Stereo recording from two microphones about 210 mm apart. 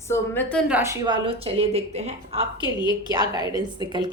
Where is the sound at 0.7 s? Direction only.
15° right (ahead or behind); by 2.4 s 30° right (ahead or behind).